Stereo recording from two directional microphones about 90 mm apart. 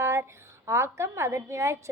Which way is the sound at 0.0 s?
30° right (ahead or behind).